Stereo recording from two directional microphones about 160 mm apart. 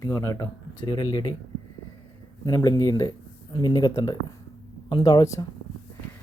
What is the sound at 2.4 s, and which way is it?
Speech, 20° left (ahead or behind).